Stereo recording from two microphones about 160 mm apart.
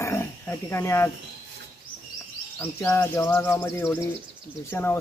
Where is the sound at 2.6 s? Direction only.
15° left (ahead or behind).